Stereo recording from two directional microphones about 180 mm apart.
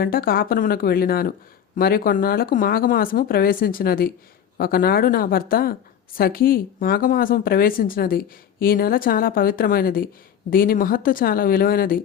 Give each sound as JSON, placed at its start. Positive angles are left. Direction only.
{"t": 0.0, "sound": "speech", "side_deg": 55}